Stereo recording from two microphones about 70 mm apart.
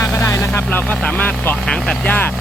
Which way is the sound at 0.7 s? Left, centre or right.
Left.